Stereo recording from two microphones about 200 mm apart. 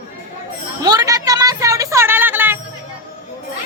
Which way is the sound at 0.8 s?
20° right (ahead or behind).